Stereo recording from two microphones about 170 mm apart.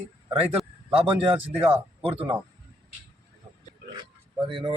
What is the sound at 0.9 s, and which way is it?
A man's voice, 30° right (ahead or behind).